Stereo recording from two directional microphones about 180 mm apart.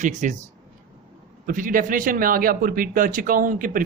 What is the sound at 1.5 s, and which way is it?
Speech, 50° right (ahead or behind).